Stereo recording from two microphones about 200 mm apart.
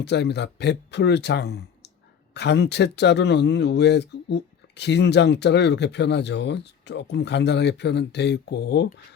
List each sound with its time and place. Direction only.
0.0 s speech: 55° left (ahead or behind)